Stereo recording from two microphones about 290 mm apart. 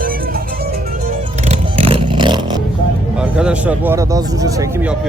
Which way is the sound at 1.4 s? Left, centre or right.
Right.